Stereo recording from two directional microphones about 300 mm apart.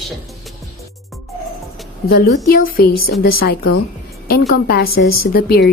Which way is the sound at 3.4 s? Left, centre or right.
Left.